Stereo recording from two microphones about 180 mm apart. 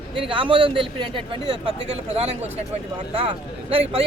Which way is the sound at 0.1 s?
30° right (ahead or behind).